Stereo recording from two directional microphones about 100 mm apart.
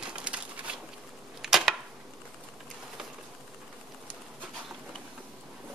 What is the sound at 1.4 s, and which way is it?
Arrow, 5° right (ahead or behind).